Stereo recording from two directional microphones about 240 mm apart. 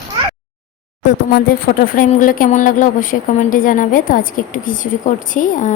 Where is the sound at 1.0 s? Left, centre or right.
Left.